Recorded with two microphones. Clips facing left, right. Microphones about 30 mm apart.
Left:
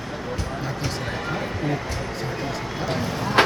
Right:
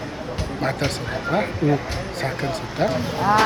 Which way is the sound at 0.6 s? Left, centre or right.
Right.